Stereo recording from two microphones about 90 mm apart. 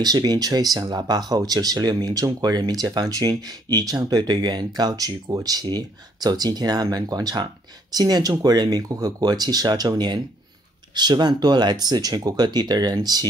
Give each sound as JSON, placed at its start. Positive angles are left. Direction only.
{"t": 0.0, "sound": "speech", "side_deg": -50}